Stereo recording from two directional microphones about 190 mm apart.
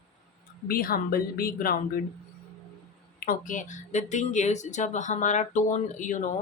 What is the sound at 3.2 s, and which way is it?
Speech, 45° left (ahead or behind).